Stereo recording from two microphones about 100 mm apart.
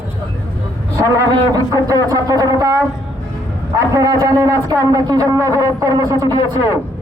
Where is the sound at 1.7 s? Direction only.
35° right (ahead or behind).